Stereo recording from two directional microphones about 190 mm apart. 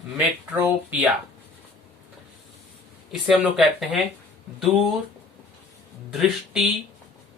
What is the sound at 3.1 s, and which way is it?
Speech, centre (ahead or behind).